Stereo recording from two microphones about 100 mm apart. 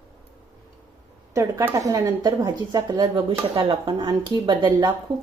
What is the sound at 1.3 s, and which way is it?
Speech, 30° right (ahead or behind).